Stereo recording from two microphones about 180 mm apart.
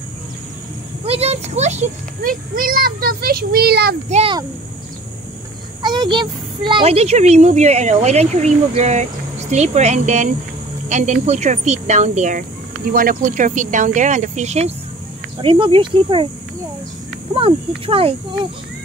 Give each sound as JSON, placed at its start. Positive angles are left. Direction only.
{"t": 1.0, "sound": "a child's voice", "side_deg": -35}
{"t": 4.1, "sound": "speech", "side_deg": -35}
{"t": 5.8, "sound": "a child's voice", "side_deg": -25}
{"t": 15.4, "sound": "speech", "side_deg": -30}
{"t": 17.3, "sound": "speech", "side_deg": -30}